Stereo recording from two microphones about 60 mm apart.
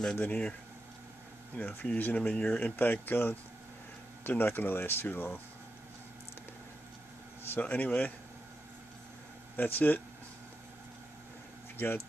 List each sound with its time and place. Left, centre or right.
0.2 s speech: left
1.6 s speech: left
7.4 s a sound: left
7.7 s speech: left
9.6 s speech: left
11.7 s a sound: left